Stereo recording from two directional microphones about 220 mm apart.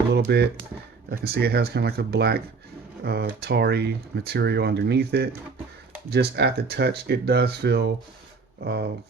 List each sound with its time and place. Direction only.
0.1 s speech: 50° right (ahead or behind)